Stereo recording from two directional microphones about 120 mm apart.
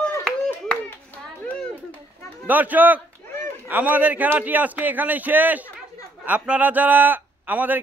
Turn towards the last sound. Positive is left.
turn(degrees=-15)  # may be behind; listen again after turning